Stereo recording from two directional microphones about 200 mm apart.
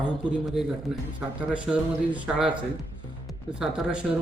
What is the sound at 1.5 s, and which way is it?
Speech, 5° right (ahead or behind).